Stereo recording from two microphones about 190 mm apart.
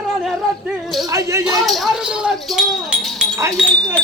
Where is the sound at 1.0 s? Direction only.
20° right (ahead or behind).